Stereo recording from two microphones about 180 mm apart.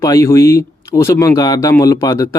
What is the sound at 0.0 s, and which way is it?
Speech, 15° left (ahead or behind).